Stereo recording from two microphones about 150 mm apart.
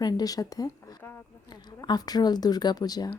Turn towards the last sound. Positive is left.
turn(degrees=25)  # may be behind; listen again after turning